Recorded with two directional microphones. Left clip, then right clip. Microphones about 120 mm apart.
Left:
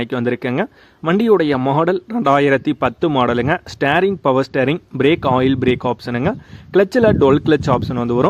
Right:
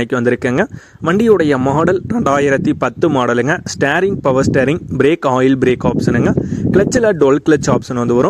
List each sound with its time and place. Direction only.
0.0 s speech: 30° right (ahead or behind)